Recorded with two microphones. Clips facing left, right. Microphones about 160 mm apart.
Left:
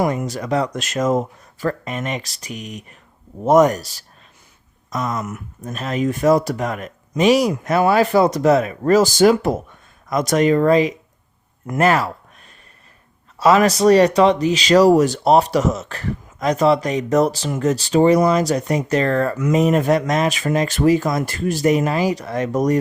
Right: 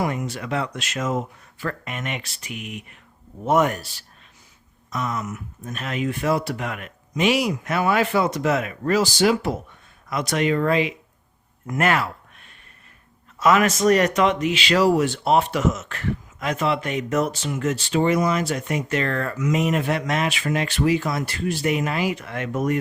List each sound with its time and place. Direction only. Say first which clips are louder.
0.0 s speech: left 5 dB; 40° left (ahead or behind)
13.4 s speech: left 4 dB; 35° left (ahead or behind)